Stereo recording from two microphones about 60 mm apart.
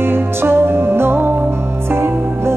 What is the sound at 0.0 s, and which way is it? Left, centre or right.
Music, right.